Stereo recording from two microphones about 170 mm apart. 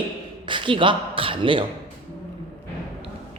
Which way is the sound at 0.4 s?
30° right (ahead or behind).